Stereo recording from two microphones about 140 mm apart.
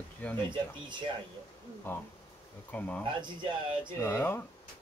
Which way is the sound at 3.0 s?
35° right (ahead or behind).